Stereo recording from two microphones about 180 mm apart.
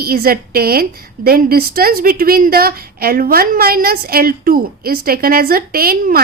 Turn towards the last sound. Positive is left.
turn(degrees=-55)  # may be behind; listen again after turning